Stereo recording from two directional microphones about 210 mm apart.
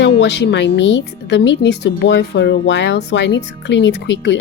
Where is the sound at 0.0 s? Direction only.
55° left (ahead or behind).